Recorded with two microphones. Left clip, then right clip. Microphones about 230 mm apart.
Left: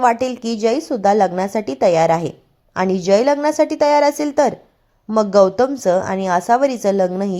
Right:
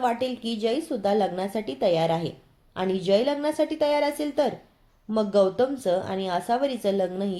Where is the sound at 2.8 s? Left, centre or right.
Left.